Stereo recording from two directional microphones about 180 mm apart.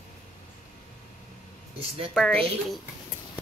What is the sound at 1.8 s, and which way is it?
Speech, 30° right (ahead or behind).